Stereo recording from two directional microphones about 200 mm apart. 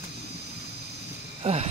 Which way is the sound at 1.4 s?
30° right (ahead or behind).